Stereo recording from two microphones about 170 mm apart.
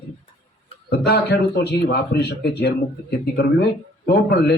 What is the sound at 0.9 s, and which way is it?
A man's voice, 70° left (ahead or behind).